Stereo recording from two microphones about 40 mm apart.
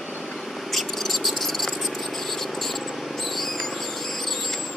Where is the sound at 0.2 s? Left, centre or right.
Centre.